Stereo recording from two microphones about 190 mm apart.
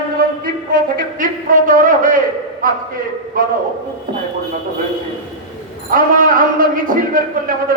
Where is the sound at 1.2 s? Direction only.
45° right (ahead or behind).